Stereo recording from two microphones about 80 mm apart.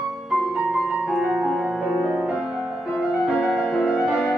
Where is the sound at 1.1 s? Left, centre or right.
Centre.